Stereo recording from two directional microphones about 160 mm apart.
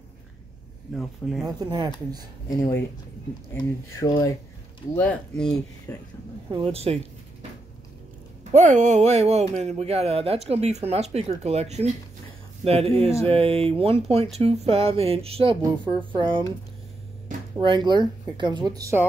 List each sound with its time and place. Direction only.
0.9 s speech: centre (ahead or behind)
1.4 s speech: 25° right (ahead or behind)
2.5 s speech: 15° left (ahead or behind)
4.9 s speech: 10° left (ahead or behind)
6.5 s speech: 35° right (ahead or behind)
8.5 s speech: 45° right (ahead or behind); by 16.4 s 30° right (ahead or behind)
17.6 s speech: 30° right (ahead or behind)